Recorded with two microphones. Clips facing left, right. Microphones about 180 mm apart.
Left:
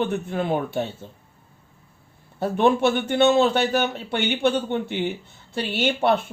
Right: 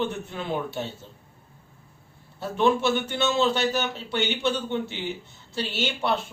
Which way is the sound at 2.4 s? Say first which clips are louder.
Left 4 dB; 55° left (ahead or behind).